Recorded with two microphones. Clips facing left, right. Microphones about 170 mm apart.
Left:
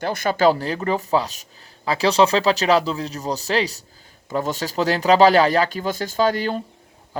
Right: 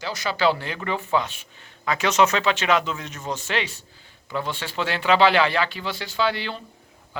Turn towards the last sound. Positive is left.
turn(degrees=40)  # may be behind; listen again after turning